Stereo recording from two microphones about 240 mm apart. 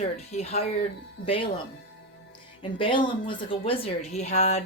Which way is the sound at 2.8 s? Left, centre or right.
Left.